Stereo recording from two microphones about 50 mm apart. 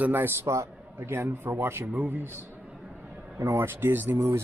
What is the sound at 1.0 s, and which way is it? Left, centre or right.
Speech, right.